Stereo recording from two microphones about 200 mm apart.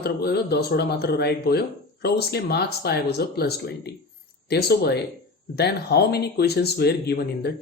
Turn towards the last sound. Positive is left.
turn(degrees=55)  # may be behind; listen again after turning